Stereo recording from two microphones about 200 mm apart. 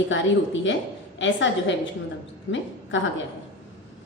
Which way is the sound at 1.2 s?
65° left (ahead or behind).